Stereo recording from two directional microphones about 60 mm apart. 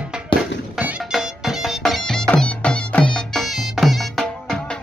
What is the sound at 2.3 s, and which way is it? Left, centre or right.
Music, centre.